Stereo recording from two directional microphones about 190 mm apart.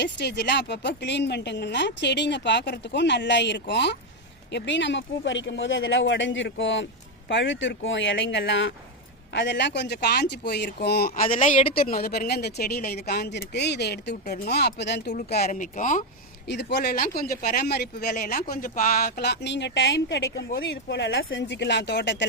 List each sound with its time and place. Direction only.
0.0 s speech: 65° left (ahead or behind); by 8.7 s 80° left
9.3 s speech: 70° left (ahead or behind)
15.4 s speech: 40° left (ahead or behind)
16.5 s speech: 65° left (ahead or behind)